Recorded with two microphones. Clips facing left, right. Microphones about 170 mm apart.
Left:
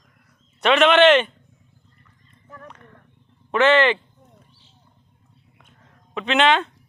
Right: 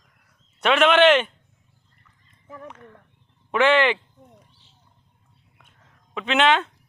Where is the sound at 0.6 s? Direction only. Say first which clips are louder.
Left 2 dB; 10° right (ahead or behind).